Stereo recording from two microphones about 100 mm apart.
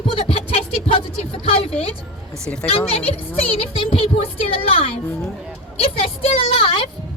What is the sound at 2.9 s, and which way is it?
Speech, 80° left.